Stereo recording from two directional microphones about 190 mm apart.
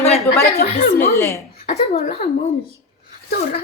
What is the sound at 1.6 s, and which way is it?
Speech, 35° left (ahead or behind).